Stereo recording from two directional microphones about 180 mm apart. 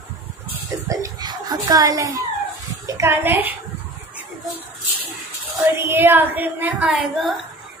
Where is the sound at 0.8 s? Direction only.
20° right (ahead or behind).